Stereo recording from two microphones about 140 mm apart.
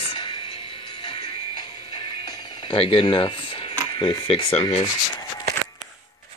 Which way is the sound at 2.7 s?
40° left (ahead or behind).